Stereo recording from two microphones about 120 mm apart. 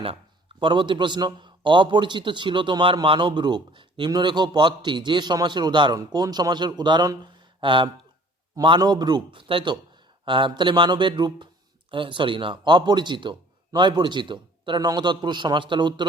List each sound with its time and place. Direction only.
0.0 s a man's voice: 50° right (ahead or behind)